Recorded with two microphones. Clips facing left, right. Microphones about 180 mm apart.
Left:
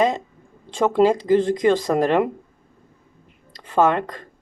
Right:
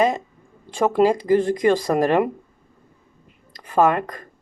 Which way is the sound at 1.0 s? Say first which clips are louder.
Left 1 dB; 25° left (ahead or behind).